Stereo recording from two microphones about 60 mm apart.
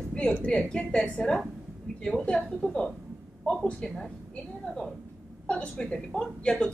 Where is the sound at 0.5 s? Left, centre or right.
Centre.